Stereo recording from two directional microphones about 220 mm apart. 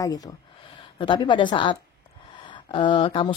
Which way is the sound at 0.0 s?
15° left (ahead or behind).